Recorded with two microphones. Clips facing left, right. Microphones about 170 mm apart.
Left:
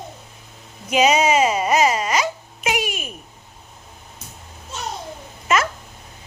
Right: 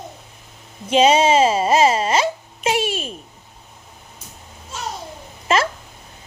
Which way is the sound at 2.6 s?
30° right (ahead or behind).